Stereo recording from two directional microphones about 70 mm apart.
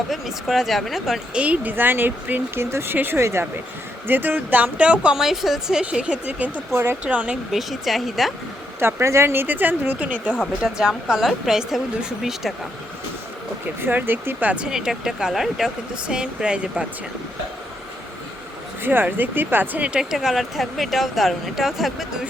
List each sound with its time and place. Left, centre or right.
0.1 s speech: centre
1.3 s speech: centre
1.7 s speech: right
4.0 s speech: right; by 5.8 s centre
5.8 s speech: centre
6.7 s speech: right
7.0 s speech: centre
7.5 s speech: centre
8.8 s speech: right
10.6 s speech: centre
13.8 s speech: right
14.7 s speech: centre
18.8 s speech: right
20.1 s speech: centre